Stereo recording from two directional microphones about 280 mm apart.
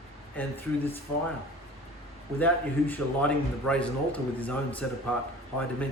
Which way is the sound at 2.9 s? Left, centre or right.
Centre.